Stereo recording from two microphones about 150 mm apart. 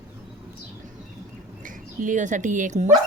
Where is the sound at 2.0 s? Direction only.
55° right (ahead or behind).